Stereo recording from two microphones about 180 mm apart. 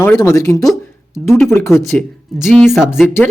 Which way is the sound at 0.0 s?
15° left (ahead or behind).